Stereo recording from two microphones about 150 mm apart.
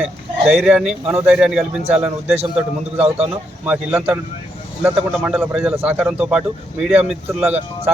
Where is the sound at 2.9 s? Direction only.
40° right (ahead or behind).